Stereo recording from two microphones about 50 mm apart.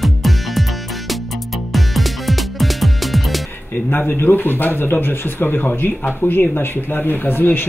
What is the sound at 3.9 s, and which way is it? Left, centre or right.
Speech, left.